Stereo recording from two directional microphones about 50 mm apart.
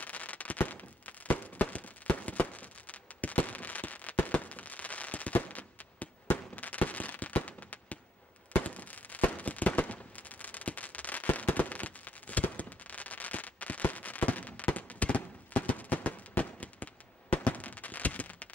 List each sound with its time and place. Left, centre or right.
0.0 s fireworks: left